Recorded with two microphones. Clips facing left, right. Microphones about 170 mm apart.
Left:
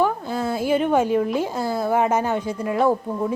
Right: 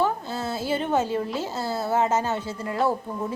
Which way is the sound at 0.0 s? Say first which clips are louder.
Left 4 dB; 15° left (ahead or behind).